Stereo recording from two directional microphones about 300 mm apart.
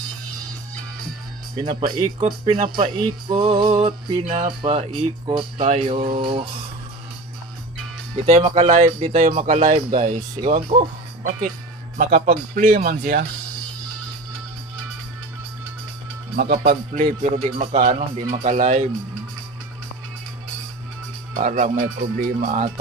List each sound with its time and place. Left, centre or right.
1.6 s speech: centre
8.3 s speech: right
12.0 s speech: right
16.3 s speech: right
21.4 s speech: right